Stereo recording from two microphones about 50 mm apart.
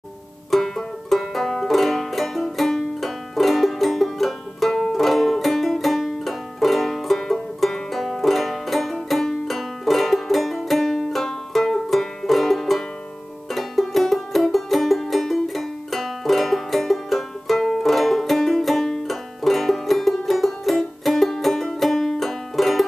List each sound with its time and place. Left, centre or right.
0.5 s banjo: centre
4.9 s music: centre